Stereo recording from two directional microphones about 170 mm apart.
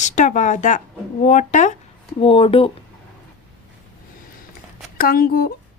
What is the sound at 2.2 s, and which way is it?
Speech, 35° left (ahead or behind).